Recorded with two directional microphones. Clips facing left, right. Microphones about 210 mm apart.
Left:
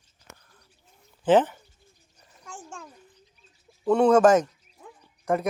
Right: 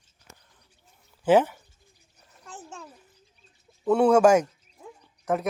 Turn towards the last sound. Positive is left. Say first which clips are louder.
# left 1 dB
turn(degrees=-5)  # may be behind; listen again after turning